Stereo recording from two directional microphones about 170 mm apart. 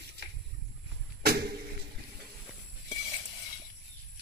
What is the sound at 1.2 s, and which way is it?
Vehicle, 65° right (ahead or behind).